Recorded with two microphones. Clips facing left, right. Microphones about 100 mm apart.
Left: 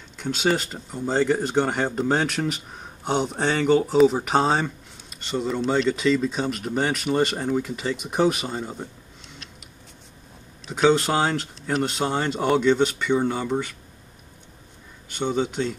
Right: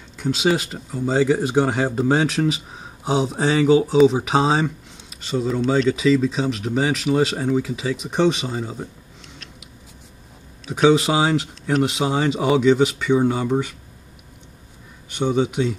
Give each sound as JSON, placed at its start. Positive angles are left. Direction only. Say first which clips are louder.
{"t": 0.2, "sound": "speech", "louder": "right 3 dB", "side_deg": -5}
{"t": 10.7, "sound": "speech", "louder": "right 3 dB", "side_deg": -5}
{"t": 15.1, "sound": "speech", "louder": "right 4 dB", "side_deg": -10}